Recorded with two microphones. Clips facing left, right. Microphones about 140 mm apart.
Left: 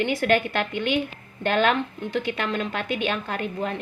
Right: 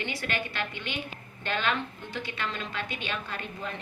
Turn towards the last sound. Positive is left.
turn(degrees=55)  # may be behind; listen again after turning